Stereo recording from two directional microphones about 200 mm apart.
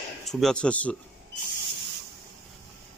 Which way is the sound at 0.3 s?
Centre (ahead or behind).